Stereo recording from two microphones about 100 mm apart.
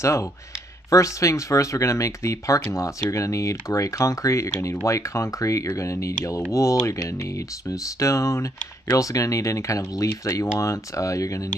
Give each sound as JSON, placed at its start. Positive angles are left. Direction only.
{"t": 0.0, "sound": "speech", "side_deg": 30}